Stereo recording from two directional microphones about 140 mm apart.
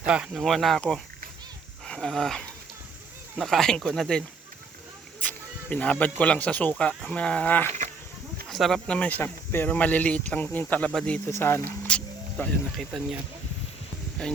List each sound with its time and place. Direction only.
0.0 s speech: 5° right (ahead or behind)
5.2 s speech: 10° left (ahead or behind)
11.3 s speech: 20° left (ahead or behind); by 13.1 s centre (ahead or behind)
14.2 s speech: 5° left (ahead or behind)